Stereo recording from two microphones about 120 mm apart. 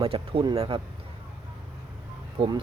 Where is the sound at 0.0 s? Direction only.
50° right (ahead or behind).